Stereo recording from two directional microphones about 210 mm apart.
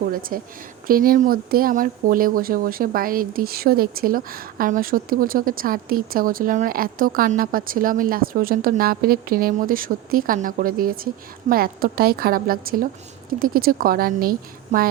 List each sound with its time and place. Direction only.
0.1 s speech: 45° right (ahead or behind)